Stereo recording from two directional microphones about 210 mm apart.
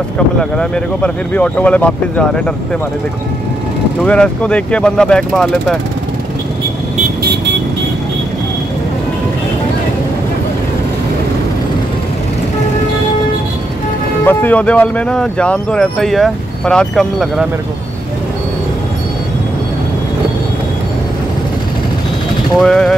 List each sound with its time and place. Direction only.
0.4 s speech: 5° left (ahead or behind)
4.0 s speech: 5° left (ahead or behind)
14.2 s speech: 10° left (ahead or behind)
22.6 s speech: centre (ahead or behind)